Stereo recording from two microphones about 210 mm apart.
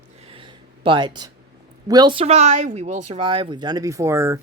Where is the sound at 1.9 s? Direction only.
20° right (ahead or behind).